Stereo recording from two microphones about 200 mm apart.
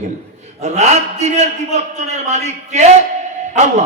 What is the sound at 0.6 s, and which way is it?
A man's voice, 35° right (ahead or behind).